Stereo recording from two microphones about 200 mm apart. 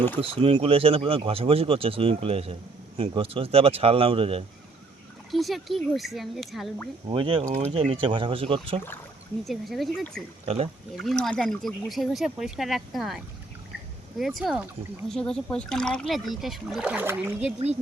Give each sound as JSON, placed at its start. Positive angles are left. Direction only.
{"t": 0.2, "sound": "speech", "side_deg": -25}
{"t": 5.3, "sound": "speech", "side_deg": 0}
{"t": 7.1, "sound": "speech", "side_deg": -25}
{"t": 9.4, "sound": "speech", "side_deg": 0}
{"t": 10.4, "sound": "speech", "side_deg": -30}
{"t": 10.9, "sound": "speech", "side_deg": 0}